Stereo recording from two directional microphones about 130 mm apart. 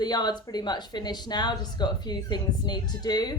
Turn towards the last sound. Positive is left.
turn(degrees=30)  # may be behind; listen again after turning